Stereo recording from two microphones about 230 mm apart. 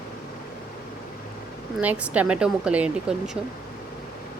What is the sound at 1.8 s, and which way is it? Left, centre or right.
A woman's voice, centre.